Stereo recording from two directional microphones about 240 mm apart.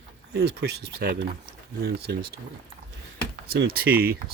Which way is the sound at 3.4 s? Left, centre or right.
Right.